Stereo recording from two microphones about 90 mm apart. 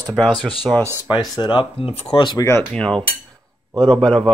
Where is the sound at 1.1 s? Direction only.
55° left (ahead or behind).